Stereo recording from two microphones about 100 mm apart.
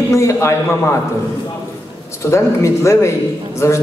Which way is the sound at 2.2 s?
30° left (ahead or behind).